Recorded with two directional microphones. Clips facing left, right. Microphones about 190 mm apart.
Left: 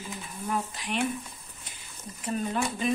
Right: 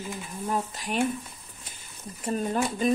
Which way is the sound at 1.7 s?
45° right (ahead or behind).